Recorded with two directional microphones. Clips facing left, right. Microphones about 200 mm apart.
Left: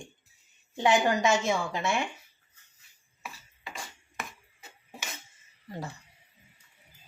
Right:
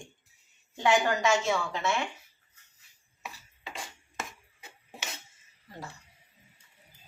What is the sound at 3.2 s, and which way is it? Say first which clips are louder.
Music: even; 20° right (ahead or behind).